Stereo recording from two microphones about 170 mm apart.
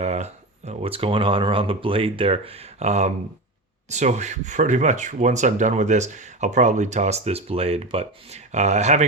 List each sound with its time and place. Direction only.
0.0 s speech: 40° right (ahead or behind)